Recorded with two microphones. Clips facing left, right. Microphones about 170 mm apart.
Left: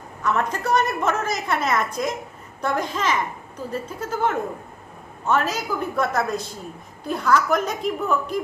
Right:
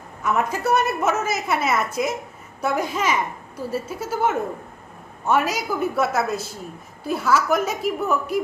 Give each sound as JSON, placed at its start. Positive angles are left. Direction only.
{"t": 0.2, "sound": "a woman's voice", "side_deg": -10}